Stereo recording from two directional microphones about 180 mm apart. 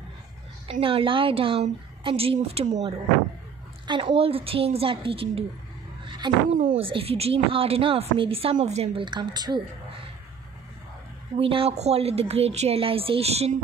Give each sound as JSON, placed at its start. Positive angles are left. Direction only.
{"t": 0.7, "sound": "a woman's voice", "side_deg": -30}
{"t": 3.8, "sound": "a woman's voice", "side_deg": -25}
{"t": 6.0, "sound": "a sound", "side_deg": -25}
{"t": 6.8, "sound": "a woman's voice", "side_deg": -30}
{"t": 11.3, "sound": "a woman's voice", "side_deg": -30}